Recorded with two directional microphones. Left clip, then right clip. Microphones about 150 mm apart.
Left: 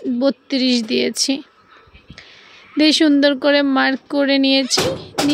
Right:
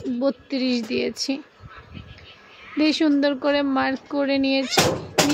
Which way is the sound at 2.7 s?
55° left (ahead or behind).